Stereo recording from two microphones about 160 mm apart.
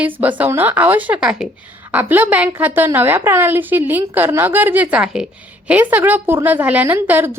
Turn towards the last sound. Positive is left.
turn(degrees=-15)  # may be behind; listen again after turning